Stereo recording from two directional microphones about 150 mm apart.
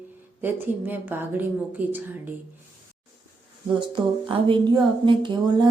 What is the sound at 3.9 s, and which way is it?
Speech, 30° right (ahead or behind).